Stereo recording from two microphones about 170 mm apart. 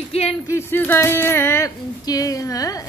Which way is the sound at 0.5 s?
15° left (ahead or behind).